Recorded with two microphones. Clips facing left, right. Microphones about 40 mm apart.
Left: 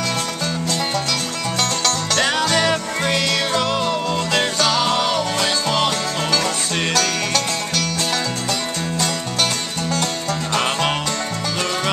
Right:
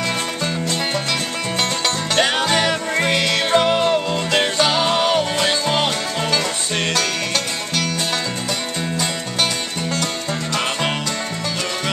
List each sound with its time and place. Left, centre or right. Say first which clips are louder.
1.6 s music: even; centre
6.9 s music: left 2 dB; centre